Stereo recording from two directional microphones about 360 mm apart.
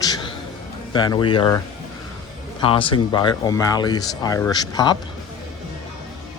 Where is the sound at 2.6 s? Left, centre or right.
Centre.